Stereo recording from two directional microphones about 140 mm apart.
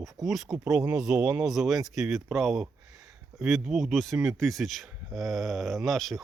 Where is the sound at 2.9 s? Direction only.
25° right (ahead or behind).